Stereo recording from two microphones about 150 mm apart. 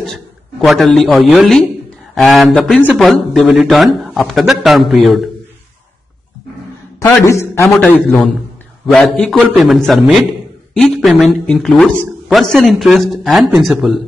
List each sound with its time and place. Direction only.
0.0 s a man's voice: 5° left (ahead or behind)
7.2 s a man's voice: 20° left (ahead or behind); by 14.0 s centre (ahead or behind)